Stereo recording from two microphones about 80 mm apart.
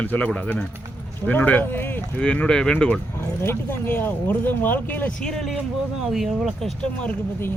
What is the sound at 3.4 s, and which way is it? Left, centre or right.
Speech, left.